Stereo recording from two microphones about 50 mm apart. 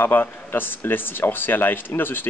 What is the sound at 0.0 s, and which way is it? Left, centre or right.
Speech, left.